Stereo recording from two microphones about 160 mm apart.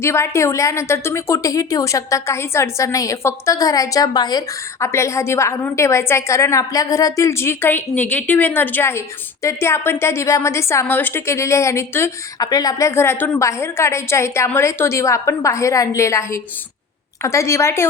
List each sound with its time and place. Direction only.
0.0 s a woman's voice: 15° left (ahead or behind)